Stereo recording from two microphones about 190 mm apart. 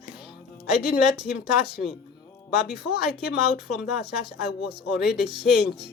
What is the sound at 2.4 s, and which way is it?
Speech, 60° left (ahead or behind).